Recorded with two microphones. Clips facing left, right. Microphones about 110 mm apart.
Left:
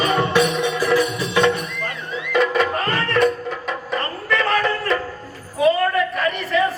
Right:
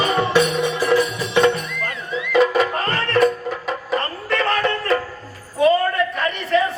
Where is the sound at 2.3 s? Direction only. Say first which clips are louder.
Right 2 dB; 35° right (ahead or behind).